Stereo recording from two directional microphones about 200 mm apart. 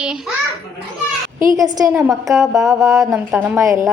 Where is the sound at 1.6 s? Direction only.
15° right (ahead or behind).